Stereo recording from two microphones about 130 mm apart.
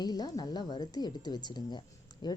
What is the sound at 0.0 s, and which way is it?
Speech, 30° left (ahead or behind).